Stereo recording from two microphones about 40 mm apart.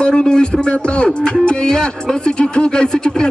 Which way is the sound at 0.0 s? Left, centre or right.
Left.